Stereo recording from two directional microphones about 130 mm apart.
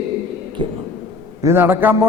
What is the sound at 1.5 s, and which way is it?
Speech, 15° right (ahead or behind).